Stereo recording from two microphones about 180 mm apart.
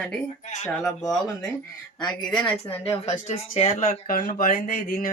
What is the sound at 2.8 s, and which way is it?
Speech, 35° left (ahead or behind).